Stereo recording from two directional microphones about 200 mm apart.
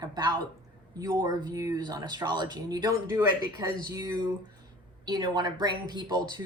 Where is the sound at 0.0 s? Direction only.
20° right (ahead or behind).